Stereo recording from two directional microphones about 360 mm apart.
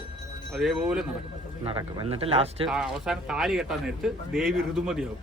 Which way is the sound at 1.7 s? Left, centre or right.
Centre.